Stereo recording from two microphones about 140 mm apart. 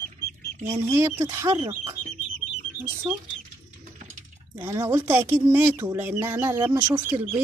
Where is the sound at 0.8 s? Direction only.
15° right (ahead or behind).